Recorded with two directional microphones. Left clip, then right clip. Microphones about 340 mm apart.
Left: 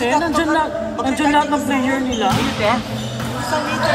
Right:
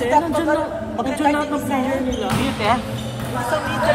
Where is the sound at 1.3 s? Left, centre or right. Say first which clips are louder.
Left 4 dB; right.